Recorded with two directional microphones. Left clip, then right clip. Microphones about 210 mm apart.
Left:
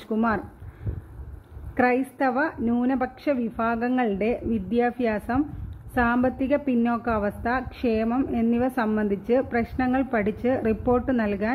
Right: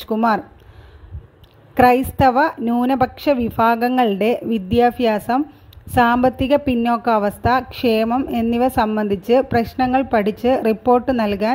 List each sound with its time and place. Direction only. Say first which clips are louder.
0.0 s speech: right 8 dB; 45° right (ahead or behind)
1.8 s a woman's voice: right 9 dB; 50° right (ahead or behind)